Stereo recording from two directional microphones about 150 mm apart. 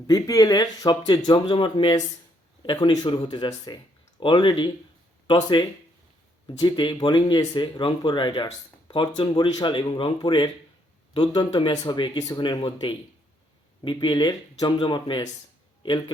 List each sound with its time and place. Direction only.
0.1 s speech: 25° left (ahead or behind)